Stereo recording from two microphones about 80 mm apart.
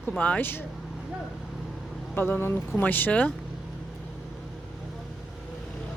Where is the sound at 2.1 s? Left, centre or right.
Left.